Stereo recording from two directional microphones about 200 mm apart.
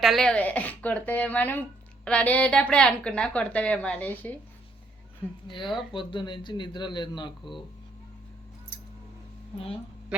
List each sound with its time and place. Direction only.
0.0 s a woman's voice: centre (ahead or behind)
5.9 s speech: 25° left (ahead or behind)